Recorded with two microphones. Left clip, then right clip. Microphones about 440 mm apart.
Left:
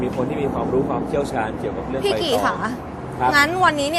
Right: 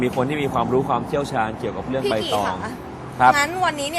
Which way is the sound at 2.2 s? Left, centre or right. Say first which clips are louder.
Left 3 dB; centre.